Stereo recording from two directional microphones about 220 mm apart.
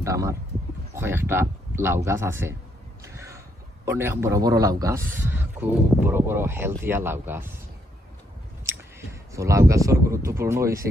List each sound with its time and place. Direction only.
0.0 s a man's voice: 15° right (ahead or behind)
3.0 s a sound: 15° right (ahead or behind)
3.8 s a man's voice: 10° right (ahead or behind)
8.6 s speech: 15° right (ahead or behind)